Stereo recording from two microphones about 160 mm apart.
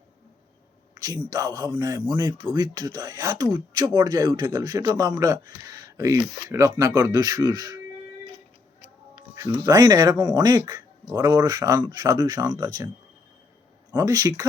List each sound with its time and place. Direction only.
0.9 s speech: 20° right (ahead or behind)
9.3 s speech: 20° right (ahead or behind)
13.9 s speech: 20° right (ahead or behind)